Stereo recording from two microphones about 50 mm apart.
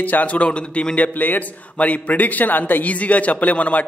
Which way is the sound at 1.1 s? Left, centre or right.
Left.